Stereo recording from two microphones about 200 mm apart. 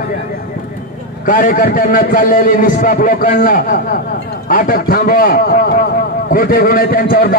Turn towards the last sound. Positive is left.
turn(degrees=45)  # may be behind; listen again after turning